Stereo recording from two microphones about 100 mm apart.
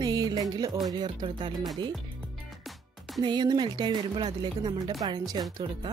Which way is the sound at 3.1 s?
45° right (ahead or behind).